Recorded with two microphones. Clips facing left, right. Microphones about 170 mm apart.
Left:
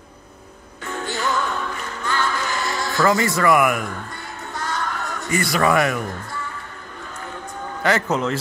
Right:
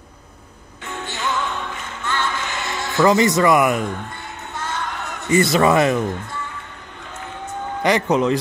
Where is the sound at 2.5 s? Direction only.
20° right (ahead or behind).